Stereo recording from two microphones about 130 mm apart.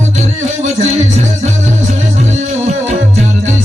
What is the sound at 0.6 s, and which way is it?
Music, 60° right (ahead or behind).